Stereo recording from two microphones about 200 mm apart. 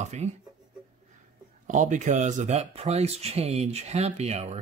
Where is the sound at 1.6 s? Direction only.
40° right (ahead or behind).